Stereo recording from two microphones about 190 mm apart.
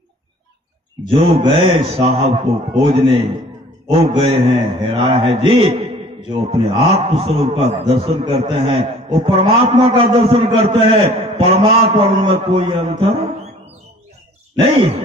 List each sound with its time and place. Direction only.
1.1 s a man's voice: 30° right (ahead or behind)
14.5 s groan: 30° right (ahead or behind)